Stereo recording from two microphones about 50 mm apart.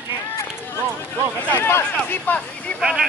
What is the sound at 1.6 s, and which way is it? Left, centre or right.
Speech, left.